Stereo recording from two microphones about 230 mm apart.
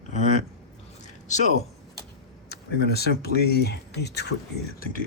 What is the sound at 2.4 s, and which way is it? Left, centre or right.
Speech, left.